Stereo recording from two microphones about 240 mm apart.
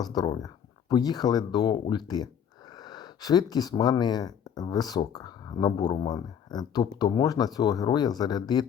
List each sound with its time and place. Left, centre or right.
0.0 s speech: centre